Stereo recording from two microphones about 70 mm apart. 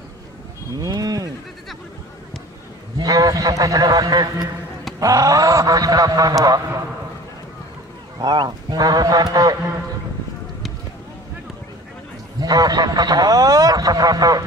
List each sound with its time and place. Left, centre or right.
0.7 s cattle: right
3.0 s speech: right
5.0 s speech: right
8.2 s speech: right
12.4 s speech: right